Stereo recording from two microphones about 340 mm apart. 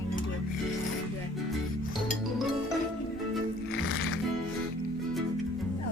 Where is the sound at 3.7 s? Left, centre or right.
Left.